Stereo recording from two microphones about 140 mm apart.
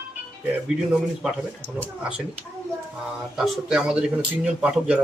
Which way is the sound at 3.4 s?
5° right (ahead or behind).